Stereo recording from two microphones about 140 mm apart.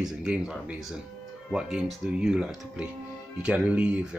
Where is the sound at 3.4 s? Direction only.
10° right (ahead or behind).